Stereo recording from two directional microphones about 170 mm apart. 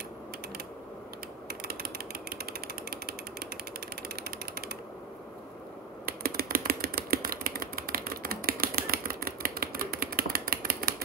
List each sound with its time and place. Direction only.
1.5 s mechanisms: 65° right (ahead or behind)
2.9 s jackhammer: 65° right (ahead or behind)
4.2 s mechanisms: 65° right (ahead or behind)
6.0 s typing: 65° right (ahead or behind)